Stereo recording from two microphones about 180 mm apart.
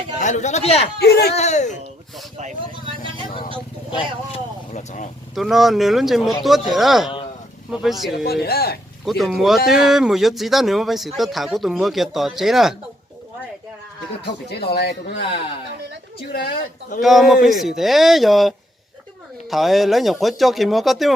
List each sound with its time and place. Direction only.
0.2 s speech: 40° left (ahead or behind)
0.9 s speech: 60° left (ahead or behind)
1.4 s speech: 40° left (ahead or behind)
3.9 s speech: 35° left (ahead or behind)
5.3 s speech: centre (ahead or behind)
8.2 s speech: 60° left (ahead or behind)
9.0 s speech: centre (ahead or behind)
14.2 s speech: 65° left (ahead or behind)
16.3 s speech: 60° left (ahead or behind)
17.0 s speech: centre (ahead or behind)